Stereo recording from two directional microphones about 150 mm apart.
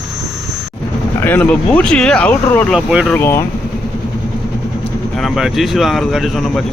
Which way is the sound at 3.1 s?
15° left (ahead or behind).